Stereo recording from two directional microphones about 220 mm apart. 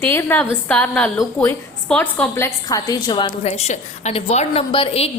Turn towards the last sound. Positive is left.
turn(degrees=25)  # may be behind; listen again after turning